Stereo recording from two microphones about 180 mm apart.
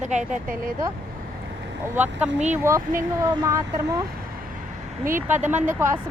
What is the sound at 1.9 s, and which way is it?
Speech, 10° right (ahead or behind).